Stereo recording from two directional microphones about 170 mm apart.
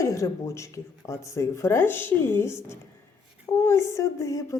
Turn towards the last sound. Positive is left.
turn(degrees=20)  # may be behind; listen again after turning